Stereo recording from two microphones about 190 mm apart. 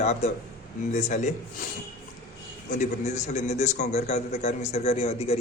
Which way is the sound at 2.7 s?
40° left (ahead or behind).